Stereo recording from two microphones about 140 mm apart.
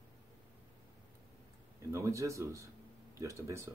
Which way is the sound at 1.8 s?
20° right (ahead or behind).